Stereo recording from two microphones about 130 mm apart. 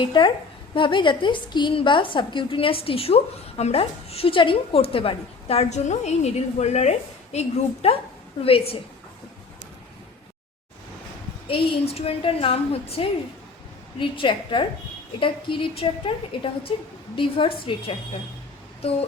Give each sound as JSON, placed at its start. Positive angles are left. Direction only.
{"t": 0.0, "sound": "a woman's voice", "side_deg": 40}
{"t": 11.4, "sound": "a woman's voice", "side_deg": 50}